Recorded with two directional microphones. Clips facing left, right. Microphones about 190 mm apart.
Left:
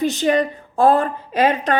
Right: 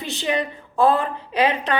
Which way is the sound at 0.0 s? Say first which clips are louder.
Left 7 dB; 45° left (ahead or behind).